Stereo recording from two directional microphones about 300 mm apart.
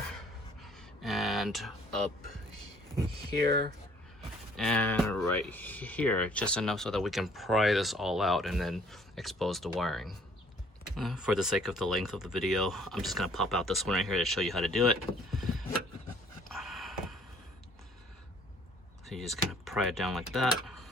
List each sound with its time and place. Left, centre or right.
0.6 s a sound: centre
3.3 s speech: right
4.5 s speech: centre
16.5 s a sound: centre
19.0 s speech: centre
20.7 s tick-tock: centre